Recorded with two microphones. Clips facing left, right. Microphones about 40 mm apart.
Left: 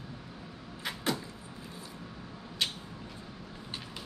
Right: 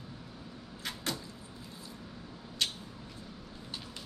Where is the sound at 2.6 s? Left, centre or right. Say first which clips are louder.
Left 1 dB; centre.